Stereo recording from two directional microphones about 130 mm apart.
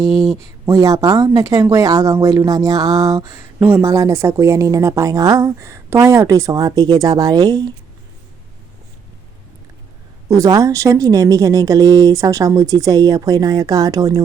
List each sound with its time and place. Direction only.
0.6 s speech: 25° right (ahead or behind)
3.6 s speech: 15° right (ahead or behind)
10.2 s speech: 25° right (ahead or behind)